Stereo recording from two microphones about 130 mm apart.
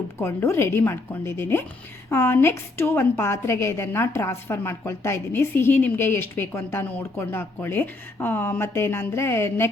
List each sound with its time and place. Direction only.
0.2 s a woman's voice: 20° left (ahead or behind)